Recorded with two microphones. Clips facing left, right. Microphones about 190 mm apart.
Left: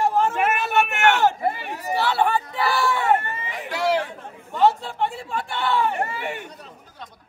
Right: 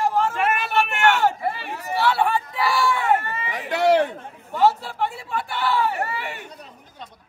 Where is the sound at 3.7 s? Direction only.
60° right (ahead or behind).